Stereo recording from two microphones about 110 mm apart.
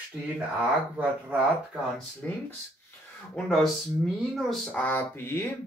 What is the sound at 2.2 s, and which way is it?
Speech, 10° left (ahead or behind).